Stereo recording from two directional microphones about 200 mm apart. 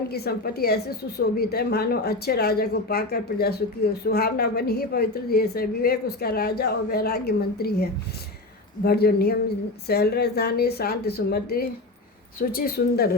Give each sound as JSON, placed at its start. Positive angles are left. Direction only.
{"t": 0.1, "sound": "speech", "side_deg": 50}